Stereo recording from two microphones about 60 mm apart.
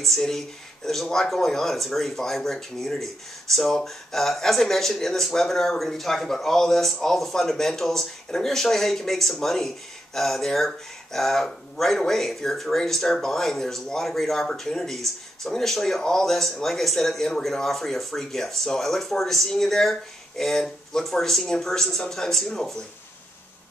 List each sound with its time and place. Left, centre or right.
0.0 s speech: centre